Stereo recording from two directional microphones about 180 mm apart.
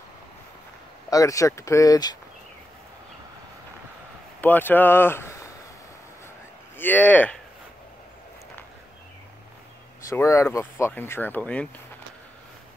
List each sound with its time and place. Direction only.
1.1 s speech: 20° left (ahead or behind)
4.4 s speech: 10° left (ahead or behind)
6.8 s speech: 10° left (ahead or behind)
10.0 s speech: 15° left (ahead or behind)